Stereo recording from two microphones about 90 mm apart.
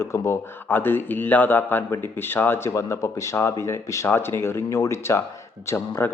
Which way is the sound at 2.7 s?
35° left (ahead or behind).